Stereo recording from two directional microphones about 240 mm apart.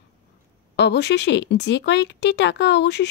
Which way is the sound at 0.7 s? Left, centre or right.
Left.